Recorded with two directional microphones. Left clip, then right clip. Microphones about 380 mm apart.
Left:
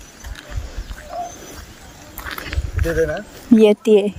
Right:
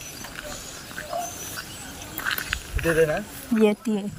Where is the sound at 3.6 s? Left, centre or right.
Centre.